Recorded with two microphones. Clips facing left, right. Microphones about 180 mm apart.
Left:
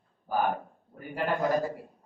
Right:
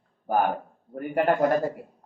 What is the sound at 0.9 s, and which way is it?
Speech, 65° right (ahead or behind).